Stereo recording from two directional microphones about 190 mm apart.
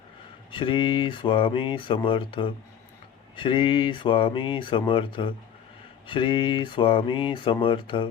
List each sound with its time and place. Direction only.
0.5 s speech: 25° left (ahead or behind)